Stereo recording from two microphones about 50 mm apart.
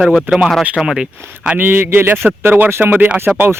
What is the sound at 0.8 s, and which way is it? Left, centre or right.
Speech, centre.